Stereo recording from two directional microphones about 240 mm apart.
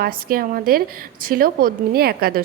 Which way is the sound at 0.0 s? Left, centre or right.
Right.